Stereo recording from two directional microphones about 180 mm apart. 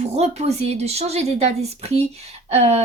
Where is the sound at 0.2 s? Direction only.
35° right (ahead or behind).